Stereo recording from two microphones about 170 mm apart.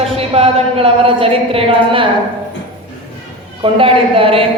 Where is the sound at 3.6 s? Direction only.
30° right (ahead or behind).